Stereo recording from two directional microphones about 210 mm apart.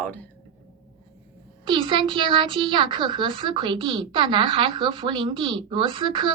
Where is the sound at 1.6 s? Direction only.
25° right (ahead or behind).